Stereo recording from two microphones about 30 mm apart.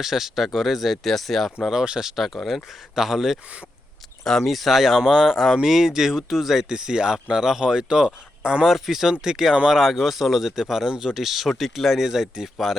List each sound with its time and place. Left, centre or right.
0.0 s speech: centre
4.2 s speech: centre
4.4 s speech: centre
4.9 s speech: centre
6.7 s speech: right
8.6 s speech: centre
10.8 s speech: right
11.2 s speech: centre